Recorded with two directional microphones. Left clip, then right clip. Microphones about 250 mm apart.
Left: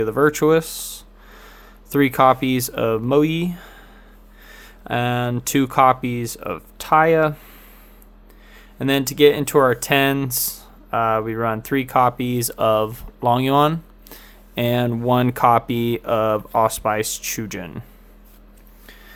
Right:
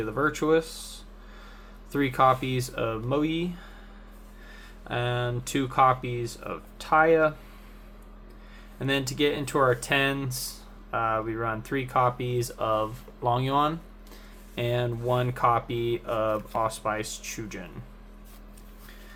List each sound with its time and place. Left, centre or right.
0.0 s speech: left
8.8 s speech: left